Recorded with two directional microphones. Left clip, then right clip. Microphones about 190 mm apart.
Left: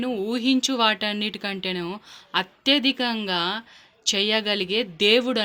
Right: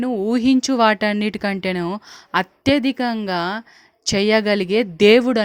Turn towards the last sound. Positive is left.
turn(degrees=-45)  # may be behind; listen again after turning